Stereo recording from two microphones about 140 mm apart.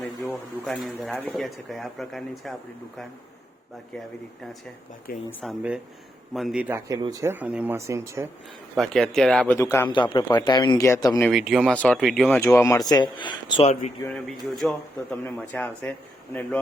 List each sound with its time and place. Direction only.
0.6 s speech: centre (ahead or behind)
5.1 s speech: 90° left
6.3 s speech: centre (ahead or behind)
6.7 s speech: 20° right (ahead or behind)
7.3 s speech: 10° right (ahead or behind)
7.8 s speech: 20° right (ahead or behind)
8.7 s speech: centre (ahead or behind)
9.6 s speech: 20° left (ahead or behind)
9.9 s speech: 35° left (ahead or behind)
11.2 s speech: centre (ahead or behind)
12.3 s speech: 20° left (ahead or behind); by 13.7 s 35° left (ahead or behind)
14.3 s speech: centre (ahead or behind)
15.1 s speech: 10° left (ahead or behind)